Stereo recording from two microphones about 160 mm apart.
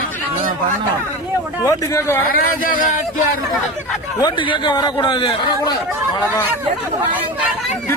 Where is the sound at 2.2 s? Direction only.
65° left (ahead or behind).